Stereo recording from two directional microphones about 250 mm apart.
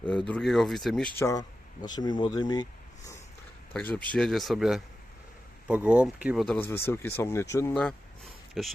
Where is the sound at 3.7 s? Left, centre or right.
Centre.